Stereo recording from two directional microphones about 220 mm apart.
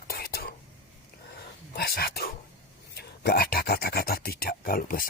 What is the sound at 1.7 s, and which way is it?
Speech, 45° left (ahead or behind).